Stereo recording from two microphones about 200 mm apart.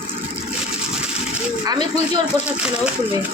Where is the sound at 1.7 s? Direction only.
20° right (ahead or behind).